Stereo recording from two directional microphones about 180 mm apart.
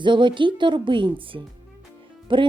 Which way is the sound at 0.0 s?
25° right (ahead or behind).